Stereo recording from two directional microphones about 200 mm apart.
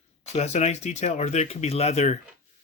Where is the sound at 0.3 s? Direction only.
35° left (ahead or behind).